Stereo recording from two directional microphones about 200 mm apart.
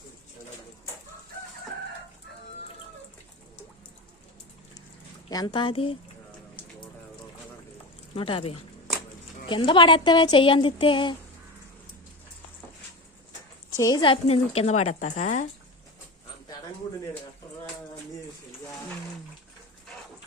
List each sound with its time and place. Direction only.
5.3 s a woman's voice: 20° left (ahead or behind)
8.1 s a woman's voice: 25° left (ahead or behind)
13.7 s a woman's voice: 20° left (ahead or behind); by 15.4 s 40° left (ahead or behind)